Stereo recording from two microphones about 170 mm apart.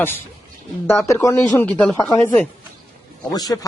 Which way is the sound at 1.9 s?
20° left (ahead or behind).